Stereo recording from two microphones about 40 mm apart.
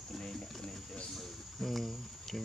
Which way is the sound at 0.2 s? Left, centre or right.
Centre.